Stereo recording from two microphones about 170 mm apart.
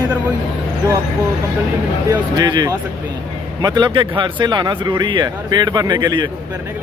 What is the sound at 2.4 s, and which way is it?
Speech, 25° right (ahead or behind).